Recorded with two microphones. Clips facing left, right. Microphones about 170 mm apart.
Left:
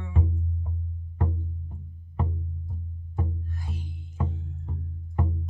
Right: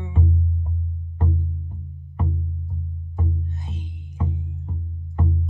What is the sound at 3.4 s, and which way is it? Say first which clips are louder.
Music: right 3 dB; 20° right (ahead or behind).